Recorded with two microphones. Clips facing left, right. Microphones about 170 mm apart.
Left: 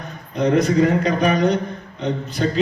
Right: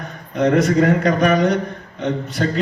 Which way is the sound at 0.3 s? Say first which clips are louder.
Right 1 dB; 70° right (ahead or behind).